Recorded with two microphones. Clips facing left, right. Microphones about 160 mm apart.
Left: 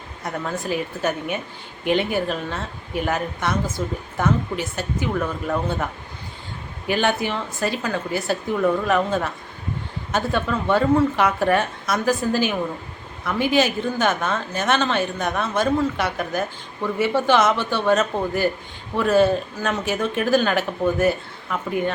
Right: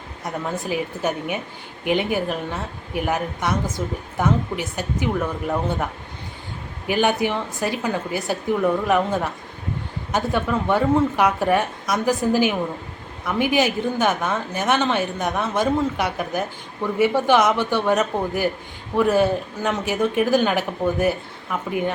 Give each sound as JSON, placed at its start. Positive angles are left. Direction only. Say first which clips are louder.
{"t": 0.4, "sound": "a woman's voice", "louder": "even", "side_deg": -15}